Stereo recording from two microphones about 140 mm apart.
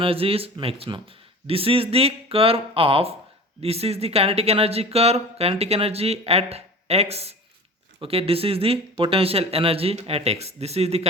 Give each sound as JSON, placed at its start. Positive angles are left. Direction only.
{"t": 0.0, "sound": "speech", "side_deg": -40}